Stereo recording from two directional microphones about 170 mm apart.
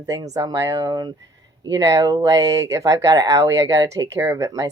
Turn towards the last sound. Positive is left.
turn(degrees=-20)  # may be behind; listen again after turning